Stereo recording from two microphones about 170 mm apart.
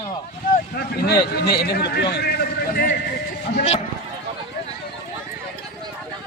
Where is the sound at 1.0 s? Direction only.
70° left (ahead or behind).